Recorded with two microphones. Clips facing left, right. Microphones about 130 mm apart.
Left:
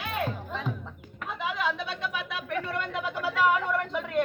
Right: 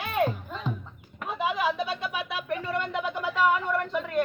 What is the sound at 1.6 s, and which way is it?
Speech, 10° right (ahead or behind).